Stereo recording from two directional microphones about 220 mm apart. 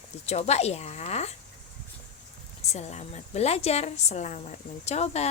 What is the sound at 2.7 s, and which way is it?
A woman's voice, 30° left (ahead or behind).